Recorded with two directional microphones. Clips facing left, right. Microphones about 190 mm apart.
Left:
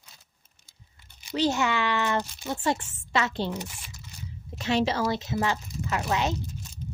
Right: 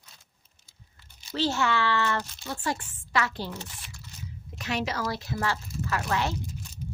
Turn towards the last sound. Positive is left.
turn(degrees=20)  # may be behind; listen again after turning